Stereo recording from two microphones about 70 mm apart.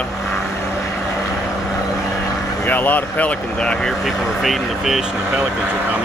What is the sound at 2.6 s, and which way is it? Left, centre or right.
Speech, left.